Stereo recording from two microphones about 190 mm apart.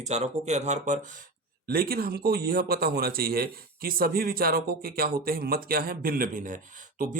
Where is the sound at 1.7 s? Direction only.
50° right (ahead or behind).